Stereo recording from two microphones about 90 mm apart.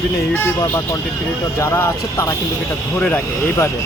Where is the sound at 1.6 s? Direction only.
30° left (ahead or behind).